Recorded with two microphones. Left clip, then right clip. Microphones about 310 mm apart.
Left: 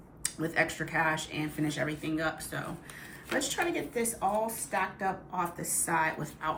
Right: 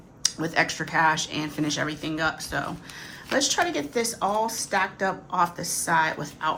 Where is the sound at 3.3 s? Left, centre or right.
Centre.